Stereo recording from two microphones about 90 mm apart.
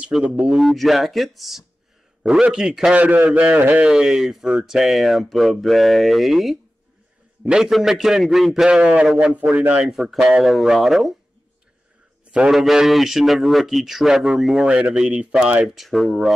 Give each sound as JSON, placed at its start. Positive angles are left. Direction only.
{"t": 0.1, "sound": "a man's voice", "side_deg": -10}
{"t": 3.9, "sound": "a man's voice", "side_deg": -5}
{"t": 9.8, "sound": "a man's voice", "side_deg": -5}
{"t": 12.3, "sound": "a man's voice", "side_deg": -5}